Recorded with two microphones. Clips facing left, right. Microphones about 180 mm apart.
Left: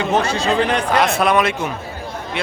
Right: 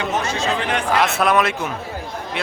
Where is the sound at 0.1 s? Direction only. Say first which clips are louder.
Left 4 dB; 30° left (ahead or behind).